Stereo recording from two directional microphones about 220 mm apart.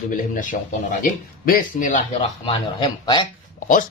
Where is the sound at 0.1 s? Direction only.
40° left (ahead or behind).